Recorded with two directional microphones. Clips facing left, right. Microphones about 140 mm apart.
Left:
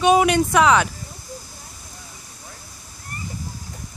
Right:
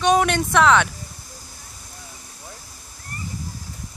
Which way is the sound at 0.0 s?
5° left (ahead or behind).